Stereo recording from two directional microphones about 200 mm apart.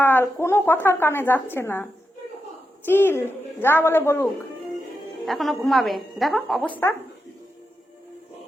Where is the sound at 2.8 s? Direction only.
10° left (ahead or behind).